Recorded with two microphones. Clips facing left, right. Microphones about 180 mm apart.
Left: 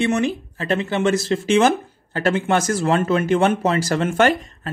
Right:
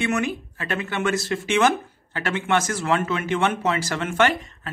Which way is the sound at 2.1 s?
40° left (ahead or behind).